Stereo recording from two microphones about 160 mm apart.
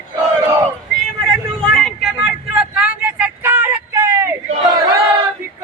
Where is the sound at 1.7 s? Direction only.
Centre (ahead or behind); by 4.8 s 20° right (ahead or behind).